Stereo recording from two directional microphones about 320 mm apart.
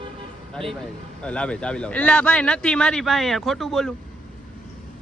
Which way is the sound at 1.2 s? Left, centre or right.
Centre.